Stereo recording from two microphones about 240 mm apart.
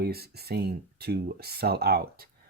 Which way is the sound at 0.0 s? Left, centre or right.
Right.